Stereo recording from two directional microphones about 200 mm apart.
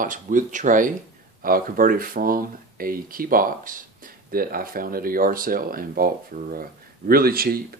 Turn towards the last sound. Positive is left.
turn(degrees=-50)  # may be behind; listen again after turning